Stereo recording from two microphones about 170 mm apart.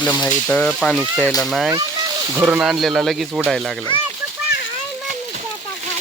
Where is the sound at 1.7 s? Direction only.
25° right (ahead or behind).